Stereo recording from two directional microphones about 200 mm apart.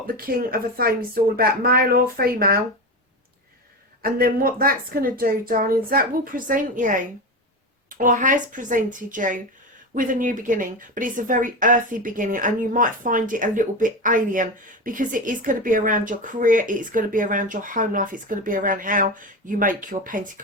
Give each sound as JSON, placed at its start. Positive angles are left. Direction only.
{"t": 0.1, "sound": "speech", "side_deg": -45}
{"t": 4.0, "sound": "a woman's voice", "side_deg": -45}